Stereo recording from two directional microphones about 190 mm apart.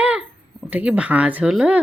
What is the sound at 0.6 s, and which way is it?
Speech, 5° right (ahead or behind).